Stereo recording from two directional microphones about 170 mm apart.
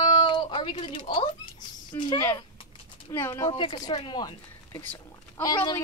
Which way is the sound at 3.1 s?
15° left (ahead or behind).